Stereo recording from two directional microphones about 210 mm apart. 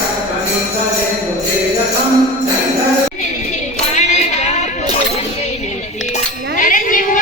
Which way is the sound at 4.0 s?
30° left (ahead or behind).